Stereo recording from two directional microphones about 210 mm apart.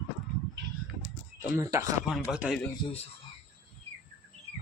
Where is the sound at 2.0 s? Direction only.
5° right (ahead or behind).